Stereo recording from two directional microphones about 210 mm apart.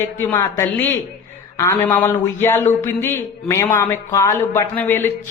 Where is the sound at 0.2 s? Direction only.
15° left (ahead or behind).